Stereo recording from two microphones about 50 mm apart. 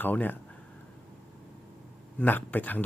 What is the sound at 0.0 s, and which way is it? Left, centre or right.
Speech, left.